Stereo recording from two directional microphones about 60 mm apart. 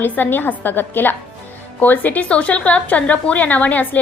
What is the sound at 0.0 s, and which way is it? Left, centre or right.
A woman's voice, left.